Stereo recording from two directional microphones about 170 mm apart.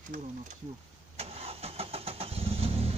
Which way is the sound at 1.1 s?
35° right (ahead or behind).